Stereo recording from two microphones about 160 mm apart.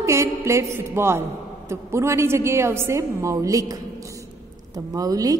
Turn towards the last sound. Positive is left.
turn(degrees=-20)  # may be behind; listen again after turning